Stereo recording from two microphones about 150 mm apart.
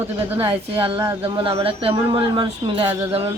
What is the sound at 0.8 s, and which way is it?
Speech, 25° right (ahead or behind).